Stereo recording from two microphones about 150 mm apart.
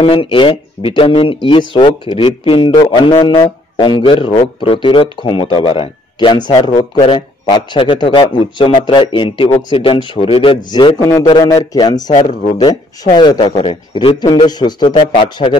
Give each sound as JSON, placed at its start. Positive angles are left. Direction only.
{"t": 0.0, "sound": "a man's voice", "side_deg": 35}